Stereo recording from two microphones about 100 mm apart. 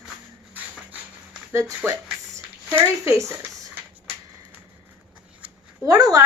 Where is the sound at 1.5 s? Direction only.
30° right (ahead or behind).